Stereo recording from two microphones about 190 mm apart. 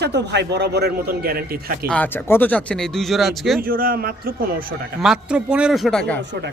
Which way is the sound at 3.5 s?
50° right (ahead or behind).